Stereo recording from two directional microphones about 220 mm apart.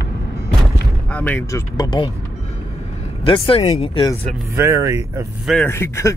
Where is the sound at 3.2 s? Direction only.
25° left (ahead or behind).